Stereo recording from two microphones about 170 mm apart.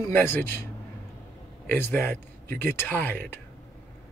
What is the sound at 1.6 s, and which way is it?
Speech, 10° left (ahead or behind).